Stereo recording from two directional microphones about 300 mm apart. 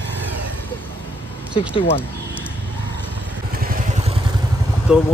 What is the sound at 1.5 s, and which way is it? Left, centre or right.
Speech, centre.